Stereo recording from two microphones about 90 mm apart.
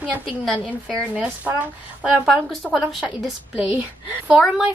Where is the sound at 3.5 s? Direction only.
20° right (ahead or behind).